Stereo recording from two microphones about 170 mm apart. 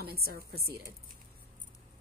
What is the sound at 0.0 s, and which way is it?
Speech, 65° right (ahead or behind).